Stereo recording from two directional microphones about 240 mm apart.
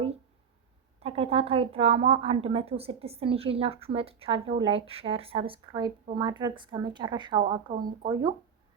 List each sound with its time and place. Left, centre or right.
0.9 s a woman's voice: right